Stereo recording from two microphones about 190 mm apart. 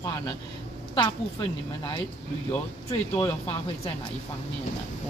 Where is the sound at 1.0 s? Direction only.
25° left (ahead or behind).